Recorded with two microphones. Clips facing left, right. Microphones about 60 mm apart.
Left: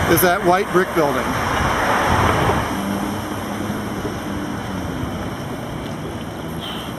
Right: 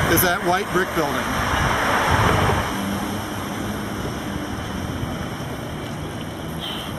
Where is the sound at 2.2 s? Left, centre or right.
Centre.